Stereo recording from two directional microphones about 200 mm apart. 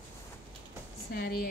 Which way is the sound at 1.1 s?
50° left (ahead or behind).